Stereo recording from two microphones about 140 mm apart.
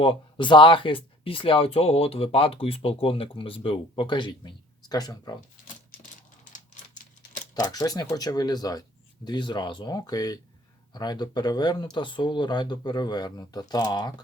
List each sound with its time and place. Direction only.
0.0 s speech: 35° left (ahead or behind)
6.5 s typewriter: 65° left (ahead or behind)
7.5 s speech: 30° left (ahead or behind)